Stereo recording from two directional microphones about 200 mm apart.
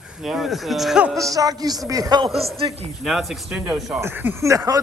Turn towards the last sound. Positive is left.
turn(degrees=-15)  # may be behind; listen again after turning